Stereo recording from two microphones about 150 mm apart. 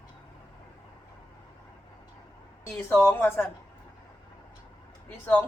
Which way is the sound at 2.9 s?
15° left (ahead or behind).